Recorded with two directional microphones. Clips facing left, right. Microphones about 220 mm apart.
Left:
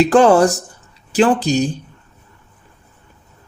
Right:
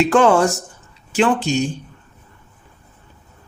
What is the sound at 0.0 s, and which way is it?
Speech, 35° left (ahead or behind).